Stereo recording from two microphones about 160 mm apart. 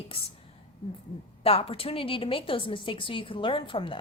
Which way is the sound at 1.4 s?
35° left (ahead or behind).